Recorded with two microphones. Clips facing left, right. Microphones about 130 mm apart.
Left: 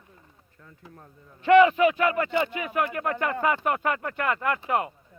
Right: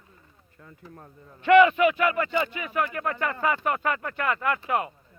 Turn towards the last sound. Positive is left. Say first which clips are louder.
# even
turn(degrees=45)  # may be behind; listen again after turning